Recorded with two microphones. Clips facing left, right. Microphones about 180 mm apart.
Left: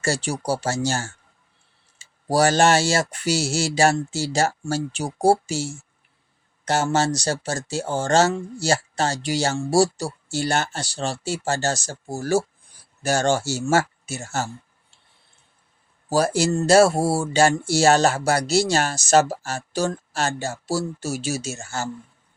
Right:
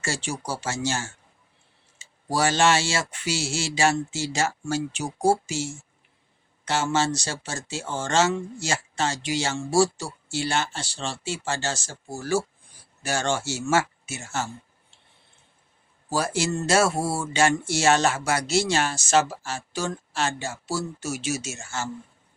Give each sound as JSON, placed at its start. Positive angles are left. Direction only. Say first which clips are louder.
{"t": 0.0, "sound": "speech", "louder": "left 6 dB", "side_deg": 40}
{"t": 16.0, "sound": "speech", "louder": "left 5 dB", "side_deg": 40}